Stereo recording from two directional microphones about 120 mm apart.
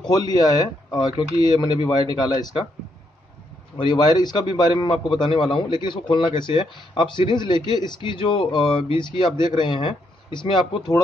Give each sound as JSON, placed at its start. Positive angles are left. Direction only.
{"t": 0.1, "sound": "a man's voice", "side_deg": 35}
{"t": 3.7, "sound": "a man's voice", "side_deg": 40}